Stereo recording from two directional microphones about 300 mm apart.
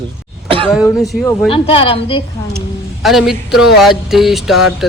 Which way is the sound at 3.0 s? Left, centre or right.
Centre.